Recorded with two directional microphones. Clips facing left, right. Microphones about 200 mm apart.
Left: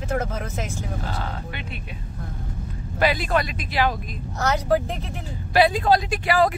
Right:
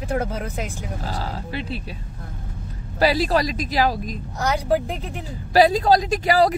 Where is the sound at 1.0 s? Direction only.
35° right (ahead or behind).